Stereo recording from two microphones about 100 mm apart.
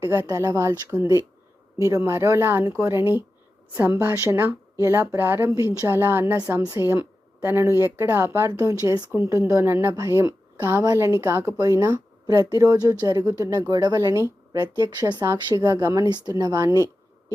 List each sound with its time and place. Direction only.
0.0 s speech: 25° right (ahead or behind)
3.8 s speech: 20° right (ahead or behind); by 9.0 s 35° right (ahead or behind)
9.1 s a woman's voice: 25° right (ahead or behind)
14.8 s speech: 40° right (ahead or behind)
16.0 s speech: 45° right (ahead or behind)